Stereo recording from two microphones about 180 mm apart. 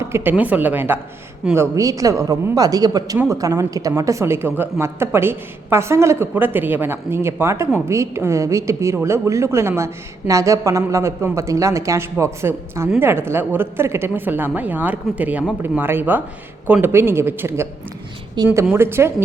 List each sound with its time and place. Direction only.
0.0 s a woman's voice: 15° right (ahead or behind)